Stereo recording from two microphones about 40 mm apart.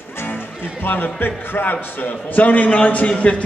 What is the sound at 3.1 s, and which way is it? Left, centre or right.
Speech, left.